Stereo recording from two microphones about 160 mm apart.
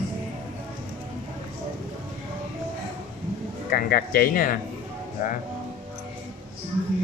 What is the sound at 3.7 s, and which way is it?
Speech, 65° left (ahead or behind).